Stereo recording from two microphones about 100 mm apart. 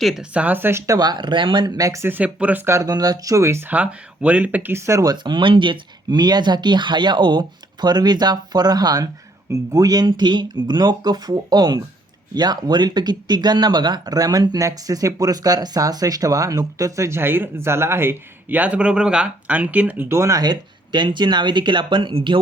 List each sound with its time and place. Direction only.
0.0 s speech: 5° right (ahead or behind); by 0.9 s 25° right (ahead or behind)
0.9 s speech: 45° right (ahead or behind); by 2.6 s 15° right (ahead or behind)
2.6 s speech: 35° right (ahead or behind)
3.7 s speech: 15° right (ahead or behind); by 5.1 s 30° right (ahead or behind)
5.1 s speech: 50° right (ahead or behind)